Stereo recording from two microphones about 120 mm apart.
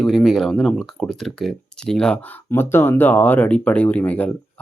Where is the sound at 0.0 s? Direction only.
5° left (ahead or behind).